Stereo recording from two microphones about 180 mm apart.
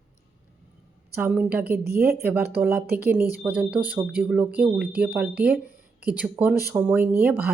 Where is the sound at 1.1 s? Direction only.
10° right (ahead or behind).